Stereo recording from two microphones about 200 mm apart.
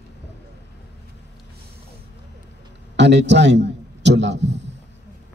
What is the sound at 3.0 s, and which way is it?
A man's voice, 60° right (ahead or behind).